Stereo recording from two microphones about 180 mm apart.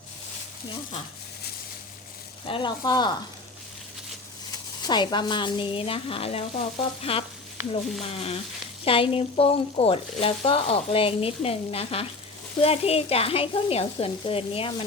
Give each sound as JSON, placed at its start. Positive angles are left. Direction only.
{"t": 2.5, "sound": "speech", "side_deg": 25}
{"t": 4.8, "sound": "speech", "side_deg": 25}